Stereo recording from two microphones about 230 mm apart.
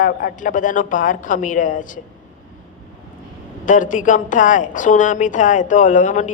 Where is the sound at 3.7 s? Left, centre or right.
Left.